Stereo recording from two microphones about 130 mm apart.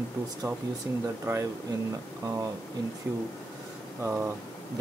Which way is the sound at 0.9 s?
20° right (ahead or behind).